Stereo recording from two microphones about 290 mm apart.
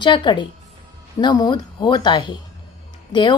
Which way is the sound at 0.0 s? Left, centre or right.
Centre.